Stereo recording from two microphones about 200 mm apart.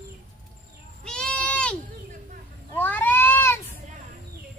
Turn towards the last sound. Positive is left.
turn(degrees=10)  # may be behind; listen again after turning